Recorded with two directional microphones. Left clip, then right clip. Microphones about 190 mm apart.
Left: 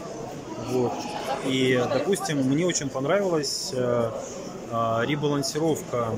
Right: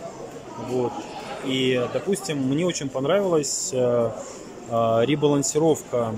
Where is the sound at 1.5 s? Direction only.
5° right (ahead or behind).